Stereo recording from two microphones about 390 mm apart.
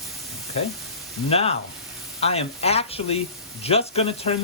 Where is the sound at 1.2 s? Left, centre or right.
Centre.